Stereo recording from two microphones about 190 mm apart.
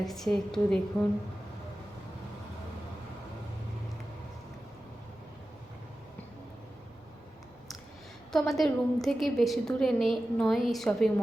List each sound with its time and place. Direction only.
0.0 s a woman's voice: centre (ahead or behind)
8.3 s a woman's voice: centre (ahead or behind)